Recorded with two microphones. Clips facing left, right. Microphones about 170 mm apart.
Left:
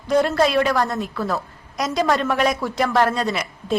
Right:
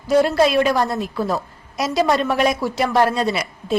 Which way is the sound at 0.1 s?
10° right (ahead or behind).